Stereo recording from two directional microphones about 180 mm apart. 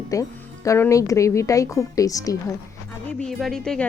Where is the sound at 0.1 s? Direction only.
20° left (ahead or behind).